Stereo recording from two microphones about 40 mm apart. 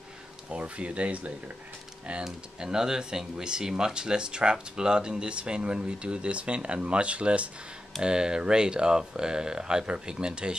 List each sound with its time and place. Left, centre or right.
0.5 s speech: right
2.2 s speech: centre
8.0 s speech: right